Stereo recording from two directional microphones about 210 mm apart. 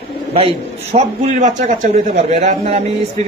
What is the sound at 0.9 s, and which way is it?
A man's voice, 35° right (ahead or behind).